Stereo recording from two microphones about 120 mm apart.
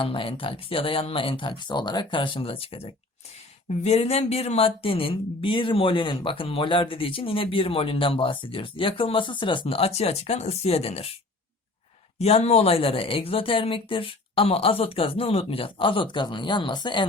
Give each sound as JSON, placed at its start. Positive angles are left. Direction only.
{"t": 0.0, "sound": "speech", "side_deg": 45}
{"t": 12.2, "sound": "speech", "side_deg": 60}